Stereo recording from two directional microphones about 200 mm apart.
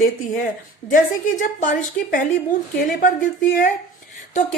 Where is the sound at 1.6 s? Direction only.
40° left (ahead or behind).